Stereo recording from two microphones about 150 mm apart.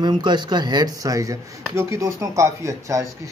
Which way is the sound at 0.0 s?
30° right (ahead or behind).